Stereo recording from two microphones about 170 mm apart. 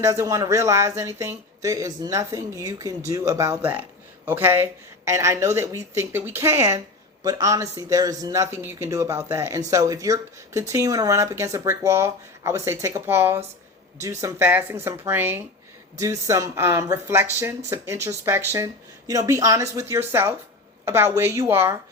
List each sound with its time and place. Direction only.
0.0 s speech: 20° right (ahead or behind)